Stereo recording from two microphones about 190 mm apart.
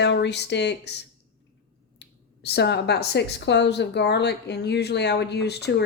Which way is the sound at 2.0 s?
60° left (ahead or behind).